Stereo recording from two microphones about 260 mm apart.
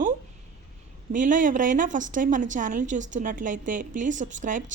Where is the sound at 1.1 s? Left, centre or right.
Right.